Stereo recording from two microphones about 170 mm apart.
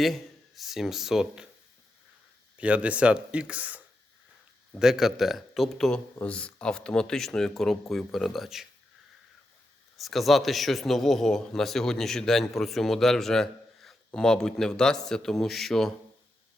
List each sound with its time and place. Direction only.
0.0 s speech: centre (ahead or behind)
2.6 s a man's voice: 10° right (ahead or behind)
10.0 s a man's voice: centre (ahead or behind)